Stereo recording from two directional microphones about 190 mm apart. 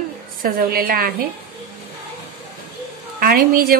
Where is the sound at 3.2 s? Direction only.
50° right (ahead or behind).